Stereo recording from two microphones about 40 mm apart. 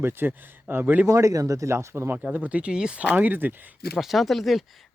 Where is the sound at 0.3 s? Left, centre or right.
Right.